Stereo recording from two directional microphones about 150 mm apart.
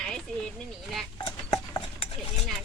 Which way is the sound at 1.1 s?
30° left (ahead or behind).